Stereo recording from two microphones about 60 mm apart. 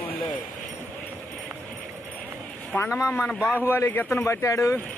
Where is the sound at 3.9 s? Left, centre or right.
Left.